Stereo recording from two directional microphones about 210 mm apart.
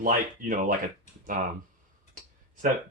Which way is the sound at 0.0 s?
40° right (ahead or behind).